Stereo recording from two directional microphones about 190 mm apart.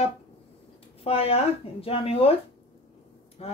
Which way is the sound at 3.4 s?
30° left (ahead or behind).